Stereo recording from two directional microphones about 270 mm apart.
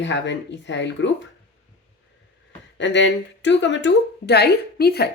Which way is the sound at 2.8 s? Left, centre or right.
Left.